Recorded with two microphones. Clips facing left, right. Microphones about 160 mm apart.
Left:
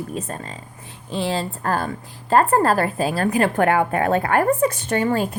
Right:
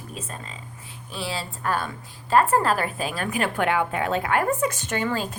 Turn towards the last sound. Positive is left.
turn(degrees=35)  # may be behind; listen again after turning